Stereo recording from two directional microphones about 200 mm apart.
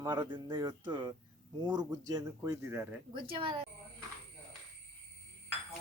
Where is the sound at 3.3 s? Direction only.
25° right (ahead or behind).